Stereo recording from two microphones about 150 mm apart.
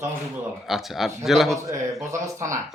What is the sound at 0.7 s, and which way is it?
Speech, centre (ahead or behind).